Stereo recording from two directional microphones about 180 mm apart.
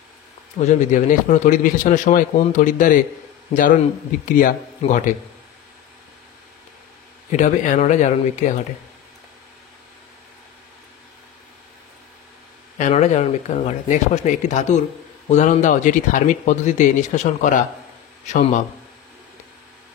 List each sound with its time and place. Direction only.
0.6 s speech: 45° left (ahead or behind)
7.2 s speech: 45° left (ahead or behind)
12.7 s a man's voice: 40° left (ahead or behind)